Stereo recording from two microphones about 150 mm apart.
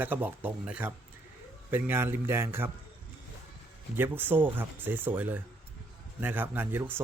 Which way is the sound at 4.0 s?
15° right (ahead or behind).